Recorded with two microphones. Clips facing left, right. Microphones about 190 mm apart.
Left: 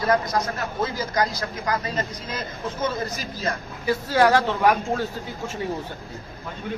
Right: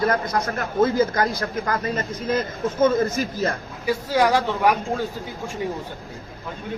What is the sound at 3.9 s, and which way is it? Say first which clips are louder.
Speech: left 1 dB; 15° right (ahead or behind).